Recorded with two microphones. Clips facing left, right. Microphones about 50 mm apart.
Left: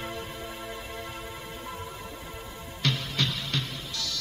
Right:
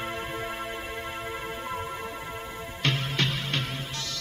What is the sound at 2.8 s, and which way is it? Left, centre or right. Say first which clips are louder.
Music: right 2 dB; right.